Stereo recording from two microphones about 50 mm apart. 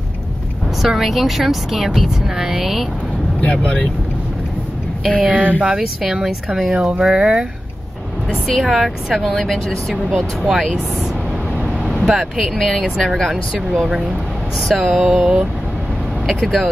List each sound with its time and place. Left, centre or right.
0.8 s a woman's voice: centre
5.2 s speech: right
5.7 s a woman's voice: centre
6.8 s speech: centre
8.3 s a woman's voice: centre
11.9 s a woman's voice: centre
14.6 s speech: centre
14.9 s speech: centre
16.3 s a woman's voice: centre